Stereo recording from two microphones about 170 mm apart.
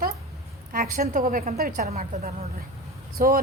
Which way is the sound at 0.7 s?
55° right (ahead or behind).